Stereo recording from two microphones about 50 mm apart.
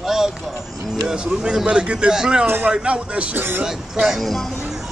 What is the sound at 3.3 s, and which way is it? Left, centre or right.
Speech, right.